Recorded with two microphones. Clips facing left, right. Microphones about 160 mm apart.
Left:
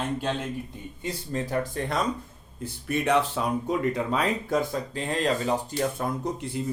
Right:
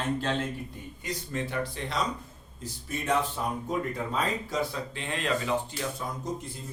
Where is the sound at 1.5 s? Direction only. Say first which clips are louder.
Left 5 dB; 50° left (ahead or behind).